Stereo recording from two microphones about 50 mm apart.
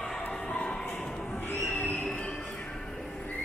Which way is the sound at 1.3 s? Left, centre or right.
Left.